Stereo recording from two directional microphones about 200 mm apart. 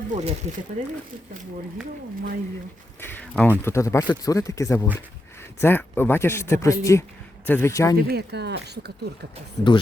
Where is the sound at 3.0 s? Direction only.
10° left (ahead or behind).